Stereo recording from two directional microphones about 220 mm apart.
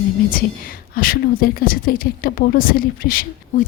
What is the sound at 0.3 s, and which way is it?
Speech, 40° left (ahead or behind).